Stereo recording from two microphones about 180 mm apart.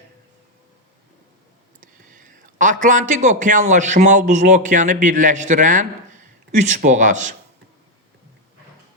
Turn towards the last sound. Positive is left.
turn(degrees=-45)  # may be behind; listen again after turning